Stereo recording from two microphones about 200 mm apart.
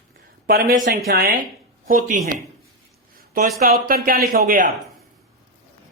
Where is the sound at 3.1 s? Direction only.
45° right (ahead or behind).